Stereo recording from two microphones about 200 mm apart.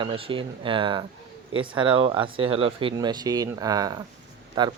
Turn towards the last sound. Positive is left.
turn(degrees=-20)  # may be behind; listen again after turning